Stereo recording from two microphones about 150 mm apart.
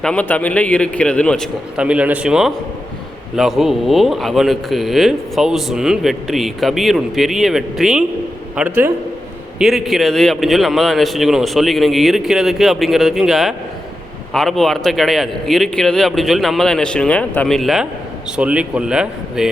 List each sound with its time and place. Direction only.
0.0 s a man's voice: 10° left (ahead or behind)
1.7 s speech: 5° right (ahead or behind)